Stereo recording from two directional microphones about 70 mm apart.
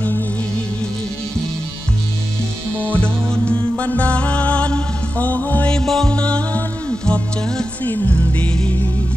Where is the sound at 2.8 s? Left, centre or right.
Centre.